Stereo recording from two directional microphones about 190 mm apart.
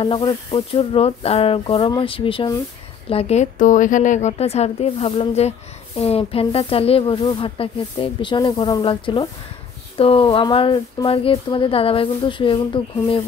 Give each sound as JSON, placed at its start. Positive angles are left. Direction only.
{"t": 0.0, "sound": "a woman's voice", "side_deg": 25}